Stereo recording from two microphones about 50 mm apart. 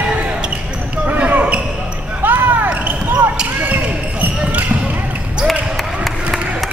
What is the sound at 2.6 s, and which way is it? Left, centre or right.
Basketball bounce, right.